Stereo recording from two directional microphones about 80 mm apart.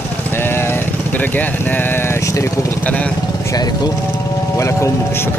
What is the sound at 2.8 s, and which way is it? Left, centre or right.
Speech, centre.